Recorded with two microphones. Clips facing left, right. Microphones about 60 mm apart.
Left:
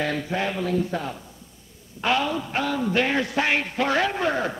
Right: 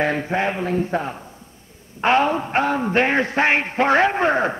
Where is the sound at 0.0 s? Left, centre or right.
Right.